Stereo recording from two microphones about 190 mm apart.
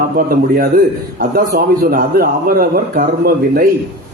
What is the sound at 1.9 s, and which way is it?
A man's voice, 50° right (ahead or behind).